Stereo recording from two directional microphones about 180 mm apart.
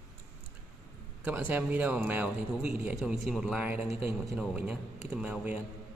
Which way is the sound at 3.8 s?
35° left (ahead or behind).